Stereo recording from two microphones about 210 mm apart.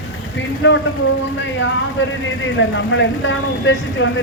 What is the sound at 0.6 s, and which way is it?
Speech, 60° left (ahead or behind).